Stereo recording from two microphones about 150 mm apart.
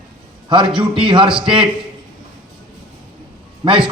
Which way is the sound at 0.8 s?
35° right (ahead or behind).